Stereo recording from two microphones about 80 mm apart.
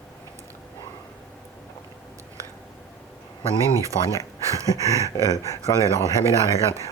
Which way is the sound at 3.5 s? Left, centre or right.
Right.